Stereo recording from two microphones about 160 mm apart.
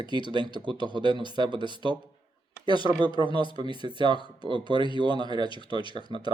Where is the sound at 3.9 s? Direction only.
30° right (ahead or behind).